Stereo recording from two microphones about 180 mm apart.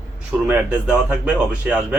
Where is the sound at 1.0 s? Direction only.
5° right (ahead or behind).